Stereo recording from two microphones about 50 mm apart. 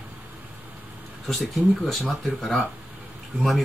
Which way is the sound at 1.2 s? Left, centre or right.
Centre.